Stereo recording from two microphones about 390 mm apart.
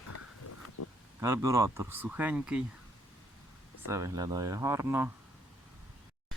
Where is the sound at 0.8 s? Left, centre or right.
Left.